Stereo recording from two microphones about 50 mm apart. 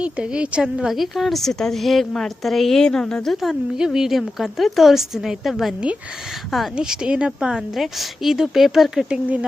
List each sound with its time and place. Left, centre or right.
0.0 s a woman's voice: centre
0.9 s a woman's voice: centre
3.2 s a woman's voice: centre
3.8 s a woman's voice: centre
6.7 s a woman's voice: centre
9.0 s speech: right